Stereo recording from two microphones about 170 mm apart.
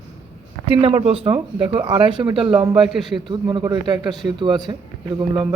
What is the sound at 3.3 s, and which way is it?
Speech, 25° right (ahead or behind).